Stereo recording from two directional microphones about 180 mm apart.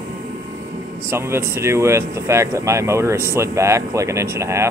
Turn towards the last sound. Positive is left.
turn(degrees=-15)  # may be behind; listen again after turning